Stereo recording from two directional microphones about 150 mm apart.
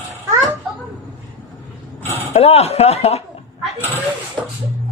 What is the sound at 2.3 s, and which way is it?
Speech, 45° left (ahead or behind).